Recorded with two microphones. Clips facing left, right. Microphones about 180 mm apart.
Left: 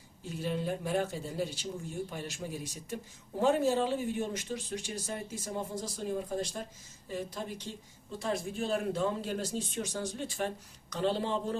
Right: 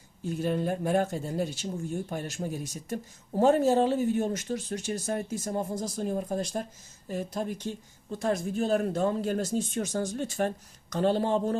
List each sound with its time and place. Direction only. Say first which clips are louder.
0.3 s speech: right 5 dB; 50° right (ahead or behind)